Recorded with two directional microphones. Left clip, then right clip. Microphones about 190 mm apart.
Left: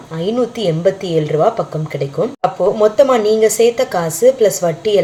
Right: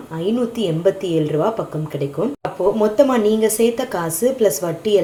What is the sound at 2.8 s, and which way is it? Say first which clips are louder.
Speech: left 5 dB; 30° right (ahead or behind).